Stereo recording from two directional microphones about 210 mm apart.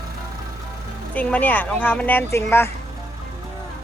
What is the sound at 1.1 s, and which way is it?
Speech, 5° left (ahead or behind).